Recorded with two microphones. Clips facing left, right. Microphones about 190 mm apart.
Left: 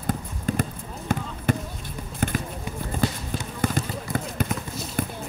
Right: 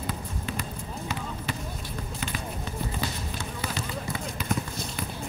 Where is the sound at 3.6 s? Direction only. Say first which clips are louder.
Left 7 dB; 50° left (ahead or behind).